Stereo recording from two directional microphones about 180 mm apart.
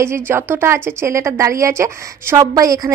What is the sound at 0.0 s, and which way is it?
A woman's voice, 15° right (ahead or behind).